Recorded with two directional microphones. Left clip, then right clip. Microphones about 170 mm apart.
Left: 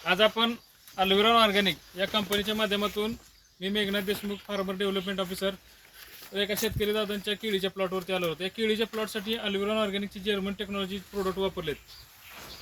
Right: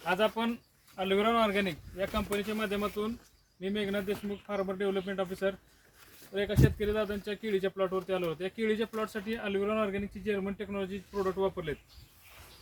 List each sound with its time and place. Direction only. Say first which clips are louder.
0.0 s speech: left 5 dB; 5° left (ahead or behind); by 10.9 s 15° right (ahead or behind)
11.1 s speech: left 1 dB; 5° left (ahead or behind)
11.3 s speech: left 2 dB; 5° right (ahead or behind)